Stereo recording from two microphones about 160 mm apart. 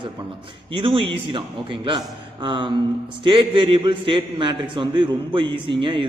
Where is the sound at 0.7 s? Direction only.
35° right (ahead or behind).